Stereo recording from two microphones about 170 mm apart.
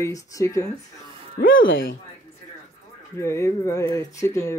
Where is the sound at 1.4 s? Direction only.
60° left (ahead or behind).